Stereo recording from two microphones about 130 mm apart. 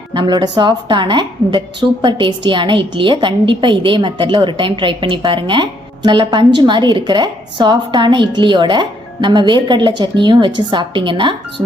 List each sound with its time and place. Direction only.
0.1 s a woman's voice: 35° right (ahead or behind)